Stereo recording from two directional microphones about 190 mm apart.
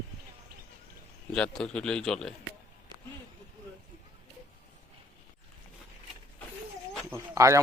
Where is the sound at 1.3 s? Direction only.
5° left (ahead or behind).